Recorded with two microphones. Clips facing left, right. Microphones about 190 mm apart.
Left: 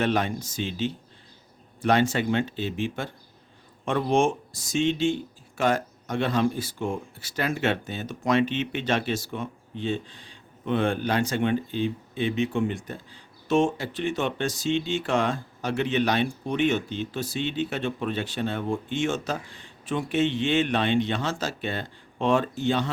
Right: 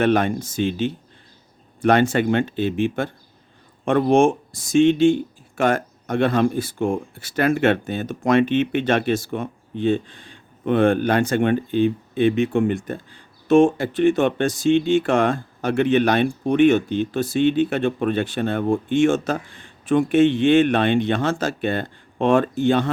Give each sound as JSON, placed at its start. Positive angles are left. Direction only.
{"t": 0.0, "sound": "speech", "side_deg": -55}